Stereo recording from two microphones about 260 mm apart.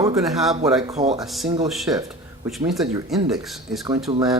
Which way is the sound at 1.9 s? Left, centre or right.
Centre.